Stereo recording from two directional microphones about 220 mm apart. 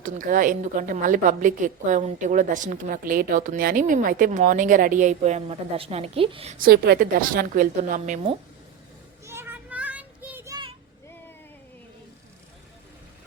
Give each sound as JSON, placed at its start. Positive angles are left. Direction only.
{"t": 0.0, "sound": "a woman's voice", "side_deg": -35}
{"t": 9.2, "sound": "children playing", "side_deg": -10}